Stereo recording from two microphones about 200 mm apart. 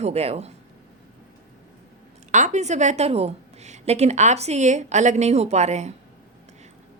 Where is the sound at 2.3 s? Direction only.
35° right (ahead or behind).